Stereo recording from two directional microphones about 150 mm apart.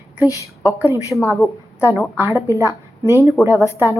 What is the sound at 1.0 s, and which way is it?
Speech, 20° left (ahead or behind).